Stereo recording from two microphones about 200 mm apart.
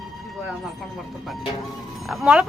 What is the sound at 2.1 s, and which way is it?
Speech, 5° right (ahead or behind).